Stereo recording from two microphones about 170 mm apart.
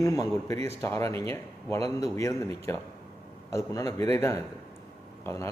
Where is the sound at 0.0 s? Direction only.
20° left (ahead or behind).